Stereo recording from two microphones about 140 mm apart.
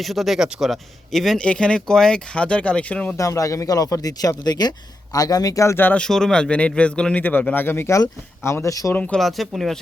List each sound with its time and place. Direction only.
0.0 s speech: centre (ahead or behind)
3.2 s speech: 25° left (ahead or behind)
9.0 s speech: 5° left (ahead or behind)